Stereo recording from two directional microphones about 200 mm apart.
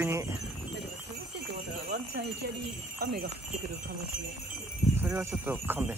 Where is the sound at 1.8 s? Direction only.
55° right (ahead or behind).